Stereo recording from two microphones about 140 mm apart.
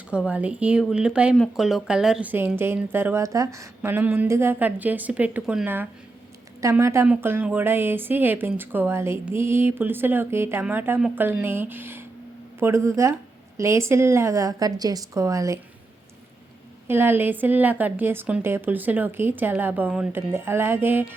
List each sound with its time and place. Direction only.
0.1 s speech: 10° right (ahead or behind)
16.8 s speech: 15° right (ahead or behind)